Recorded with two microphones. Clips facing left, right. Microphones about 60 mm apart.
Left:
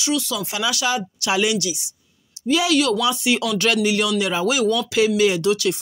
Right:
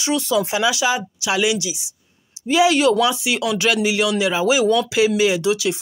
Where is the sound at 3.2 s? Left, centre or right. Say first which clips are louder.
Even; centre.